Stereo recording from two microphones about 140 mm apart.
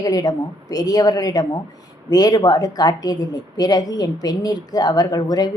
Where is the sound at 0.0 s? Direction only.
25° left (ahead or behind).